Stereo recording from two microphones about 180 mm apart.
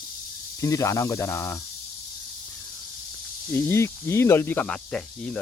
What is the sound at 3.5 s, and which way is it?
Speech, 15° left (ahead or behind).